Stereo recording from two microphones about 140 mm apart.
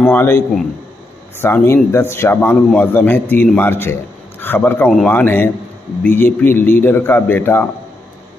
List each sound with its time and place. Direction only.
0.1 s a man's voice: 15° left (ahead or behind)
1.4 s a man's voice: 15° left (ahead or behind)